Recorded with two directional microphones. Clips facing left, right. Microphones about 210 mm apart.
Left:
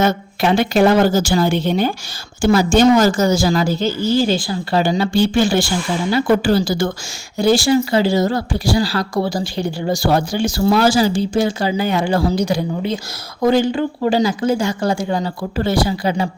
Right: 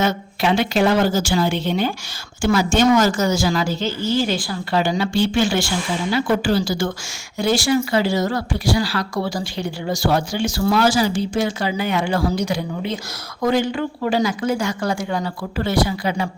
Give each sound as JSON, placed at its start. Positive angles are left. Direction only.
{"t": 0.0, "sound": "speech", "side_deg": 45}